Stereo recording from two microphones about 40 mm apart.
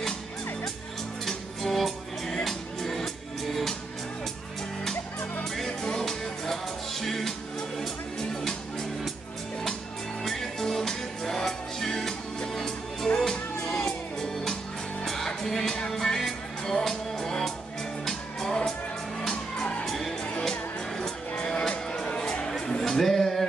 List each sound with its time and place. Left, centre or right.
1.2 s music: centre
5.4 s music: centre
10.2 s music: centre
19.8 s music: centre; by 22.5 s left
22.8 s music: centre